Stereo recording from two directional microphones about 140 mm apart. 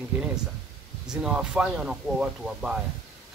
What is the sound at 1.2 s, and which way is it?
Speech, 5° right (ahead or behind).